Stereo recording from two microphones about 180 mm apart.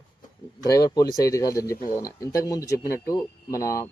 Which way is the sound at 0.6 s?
20° left (ahead or behind).